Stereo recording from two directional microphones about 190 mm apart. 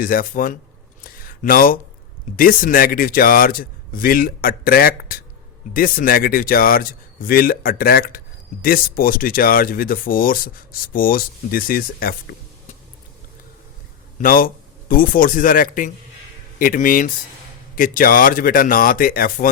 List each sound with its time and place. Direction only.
0.0 s speech: 45° left (ahead or behind)
1.0 s a sound: 50° left (ahead or behind)
2.3 s speech: 50° left (ahead or behind)
14.2 s speech: 50° left (ahead or behind)